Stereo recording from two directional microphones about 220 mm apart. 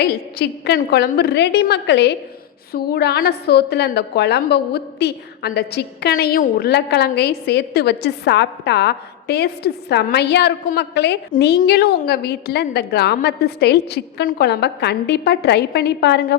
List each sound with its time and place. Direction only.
0.0 s a woman's voice: 50° left (ahead or behind)